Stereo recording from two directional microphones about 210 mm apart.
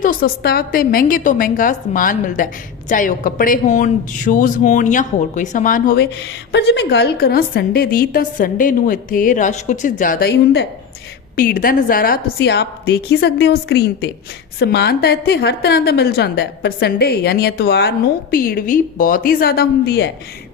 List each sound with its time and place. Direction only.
0.0 s a woman's voice: 40° left (ahead or behind)
6.5 s a woman's voice: 55° left (ahead or behind)